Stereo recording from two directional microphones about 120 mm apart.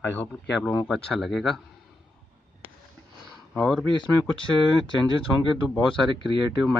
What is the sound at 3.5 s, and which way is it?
Speech, 5° left (ahead or behind).